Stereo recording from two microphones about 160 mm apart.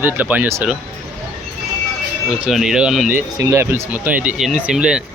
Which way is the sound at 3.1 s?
20° right (ahead or behind).